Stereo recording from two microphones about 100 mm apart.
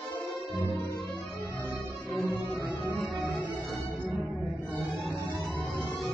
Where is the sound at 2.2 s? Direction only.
20° left (ahead or behind).